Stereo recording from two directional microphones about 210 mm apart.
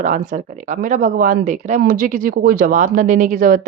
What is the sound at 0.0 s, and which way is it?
Speech, 35° right (ahead or behind).